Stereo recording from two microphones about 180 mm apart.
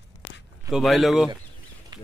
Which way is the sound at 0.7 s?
Centre (ahead or behind).